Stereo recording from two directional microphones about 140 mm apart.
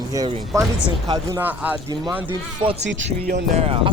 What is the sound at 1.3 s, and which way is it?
Speech, 15° right (ahead or behind).